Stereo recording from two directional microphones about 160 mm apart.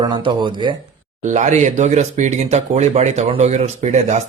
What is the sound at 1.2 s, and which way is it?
Speech, 50° right (ahead or behind).